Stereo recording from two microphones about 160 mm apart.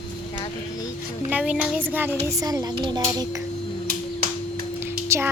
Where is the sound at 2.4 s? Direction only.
20° right (ahead or behind).